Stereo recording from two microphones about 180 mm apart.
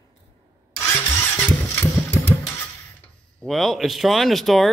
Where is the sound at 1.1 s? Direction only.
10° left (ahead or behind).